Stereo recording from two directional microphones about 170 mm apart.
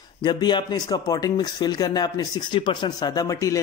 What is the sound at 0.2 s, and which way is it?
Speech, 25° left (ahead or behind).